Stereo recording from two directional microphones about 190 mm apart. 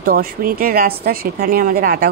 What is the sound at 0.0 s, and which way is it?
Speech, 50° right (ahead or behind).